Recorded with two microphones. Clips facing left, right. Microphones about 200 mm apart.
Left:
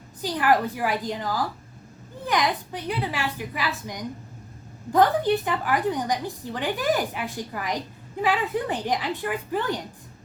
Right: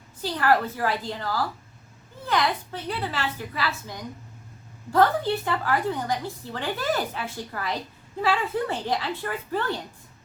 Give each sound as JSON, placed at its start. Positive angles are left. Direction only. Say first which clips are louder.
{"t": 0.2, "sound": "a woman's voice", "louder": "left 1 dB", "side_deg": 15}